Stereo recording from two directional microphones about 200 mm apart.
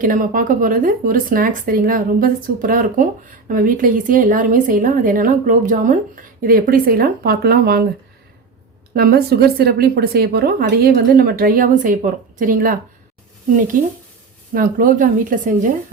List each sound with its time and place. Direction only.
0.0 s a woman's voice: 45° right (ahead or behind)
9.0 s a woman's voice: 50° right (ahead or behind)